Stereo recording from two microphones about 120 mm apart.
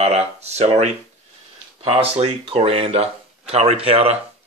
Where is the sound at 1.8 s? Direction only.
55° right (ahead or behind).